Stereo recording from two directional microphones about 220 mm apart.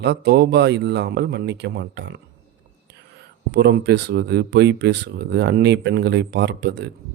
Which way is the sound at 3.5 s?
50° right (ahead or behind).